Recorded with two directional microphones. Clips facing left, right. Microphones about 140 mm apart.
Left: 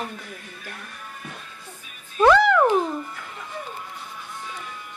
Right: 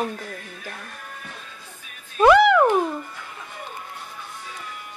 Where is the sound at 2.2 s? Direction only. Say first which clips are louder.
Right 2 dB; 15° right (ahead or behind).